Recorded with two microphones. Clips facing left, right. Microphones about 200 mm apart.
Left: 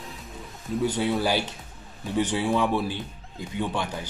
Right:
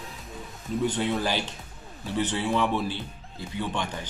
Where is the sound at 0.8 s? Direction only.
10° left (ahead or behind).